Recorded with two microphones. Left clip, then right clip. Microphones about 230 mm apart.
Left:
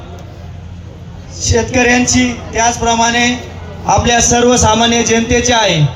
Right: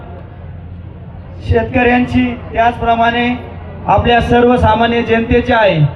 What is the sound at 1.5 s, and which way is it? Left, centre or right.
A man's voice, left.